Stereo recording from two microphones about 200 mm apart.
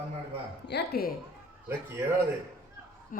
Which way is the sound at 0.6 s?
55° left (ahead or behind).